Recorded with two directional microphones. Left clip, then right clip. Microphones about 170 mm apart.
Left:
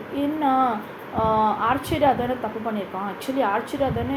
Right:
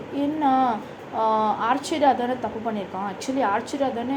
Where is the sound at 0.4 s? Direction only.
20° right (ahead or behind).